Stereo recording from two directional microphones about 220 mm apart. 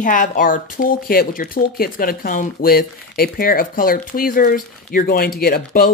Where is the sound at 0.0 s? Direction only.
35° left (ahead or behind).